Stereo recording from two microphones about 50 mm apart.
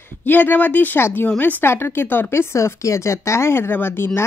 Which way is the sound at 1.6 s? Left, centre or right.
Left.